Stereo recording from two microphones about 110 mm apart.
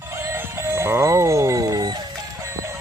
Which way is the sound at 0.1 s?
25° right (ahead or behind).